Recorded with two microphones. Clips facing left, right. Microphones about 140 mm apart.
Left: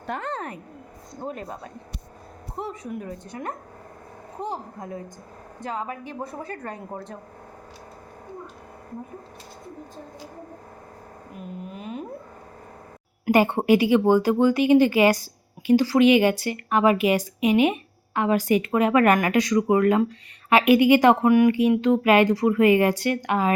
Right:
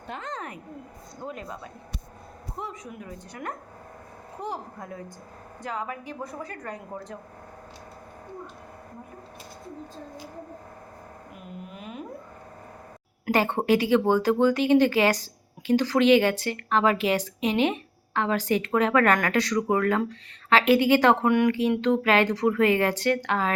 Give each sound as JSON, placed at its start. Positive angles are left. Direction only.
{"t": 0.1, "sound": "speech", "side_deg": 60}
{"t": 0.3, "sound": "a sound", "side_deg": 35}
{"t": 1.2, "sound": "speech", "side_deg": 40}
{"t": 3.2, "sound": "a woman's voice", "side_deg": 25}
{"t": 11.7, "sound": "a sound", "side_deg": 30}
{"t": 13.2, "sound": "speech", "side_deg": 10}